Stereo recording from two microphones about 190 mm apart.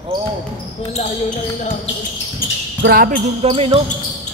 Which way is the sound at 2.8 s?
50° right (ahead or behind).